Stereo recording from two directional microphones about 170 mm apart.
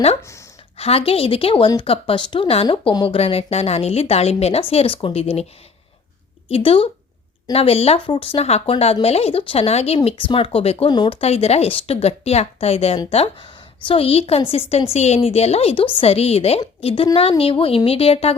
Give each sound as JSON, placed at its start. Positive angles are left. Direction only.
{"t": 0.8, "sound": "speech", "side_deg": 35}
{"t": 6.5, "sound": "speech", "side_deg": 30}